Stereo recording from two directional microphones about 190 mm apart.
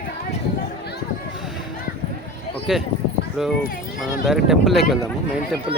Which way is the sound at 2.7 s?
5° right (ahead or behind).